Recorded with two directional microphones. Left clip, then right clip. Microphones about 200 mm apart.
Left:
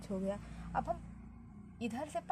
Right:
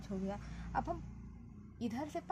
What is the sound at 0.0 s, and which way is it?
A woman's voice, 45° left (ahead or behind).